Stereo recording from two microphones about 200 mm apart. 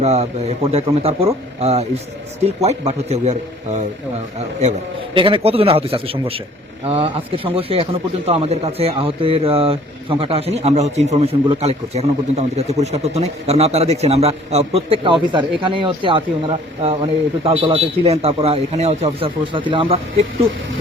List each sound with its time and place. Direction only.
0.0 s a man's voice: 35° right (ahead or behind)
5.1 s speech: 25° right (ahead or behind)